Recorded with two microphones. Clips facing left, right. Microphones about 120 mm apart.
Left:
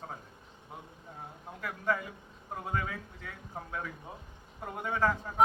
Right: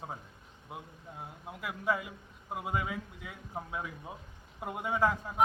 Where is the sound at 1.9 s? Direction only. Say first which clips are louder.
Even; 10° right (ahead or behind).